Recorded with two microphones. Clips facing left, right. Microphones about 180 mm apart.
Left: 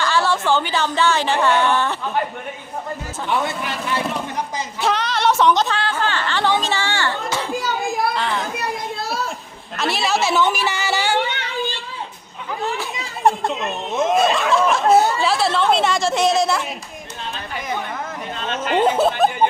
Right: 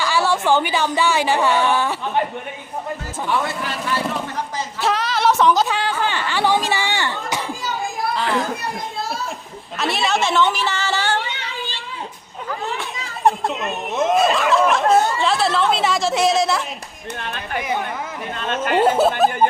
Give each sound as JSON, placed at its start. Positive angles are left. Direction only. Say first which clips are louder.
{"t": 0.0, "sound": "a woman's voice", "louder": "even", "side_deg": -10}
{"t": 3.2, "sound": "speech", "louder": "even", "side_deg": 20}
{"t": 4.8, "sound": "a sound", "louder": "even", "side_deg": 0}
{"t": 5.6, "sound": "speech", "louder": "even", "side_deg": -15}
{"t": 8.1, "sound": "a child's voice", "louder": "right 2 dB", "side_deg": 0}
{"t": 9.7, "sound": "a woman's voice", "louder": "even", "side_deg": 0}
{"t": 11.3, "sound": "a sound", "louder": "left 5 dB", "side_deg": 60}
{"t": 12.7, "sound": "speech", "louder": "left 1 dB", "side_deg": 0}
{"t": 17.2, "sound": "a sound", "louder": "right 3 dB", "side_deg": -60}
{"t": 18.3, "sound": "chatter", "louder": "right 3 dB", "side_deg": -50}
{"t": 18.7, "sound": "speech", "louder": "right 1 dB", "side_deg": -5}